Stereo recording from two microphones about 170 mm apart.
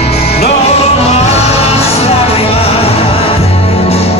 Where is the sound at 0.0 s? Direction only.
40° left (ahead or behind).